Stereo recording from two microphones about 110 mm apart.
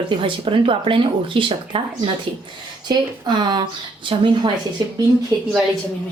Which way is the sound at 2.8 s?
40° right (ahead or behind).